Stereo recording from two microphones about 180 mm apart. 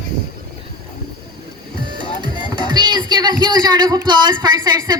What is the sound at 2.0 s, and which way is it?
Speech, 25° right (ahead or behind).